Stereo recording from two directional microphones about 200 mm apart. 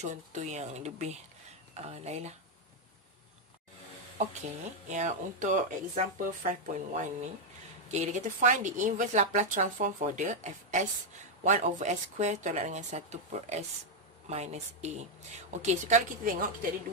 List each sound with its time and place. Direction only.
0.0 s a woman's voice: 35° right (ahead or behind)
4.8 s a woman's voice: 35° right (ahead or behind)